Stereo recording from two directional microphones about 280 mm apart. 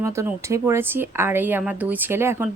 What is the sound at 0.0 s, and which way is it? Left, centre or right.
A woman's voice, centre.